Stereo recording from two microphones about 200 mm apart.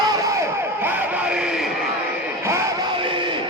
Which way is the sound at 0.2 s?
15° right (ahead or behind).